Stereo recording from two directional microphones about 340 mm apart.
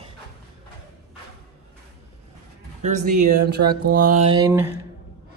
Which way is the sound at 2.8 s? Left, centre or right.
Right.